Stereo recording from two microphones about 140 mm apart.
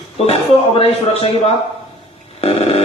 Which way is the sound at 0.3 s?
45° left (ahead or behind).